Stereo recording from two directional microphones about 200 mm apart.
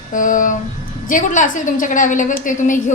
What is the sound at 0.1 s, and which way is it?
A woman's voice, 40° left (ahead or behind).